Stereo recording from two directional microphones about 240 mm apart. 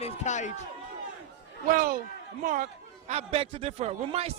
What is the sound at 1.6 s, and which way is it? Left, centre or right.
A man's voice, right.